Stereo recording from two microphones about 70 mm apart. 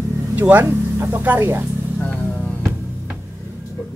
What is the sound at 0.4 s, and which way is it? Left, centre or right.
Speech, right.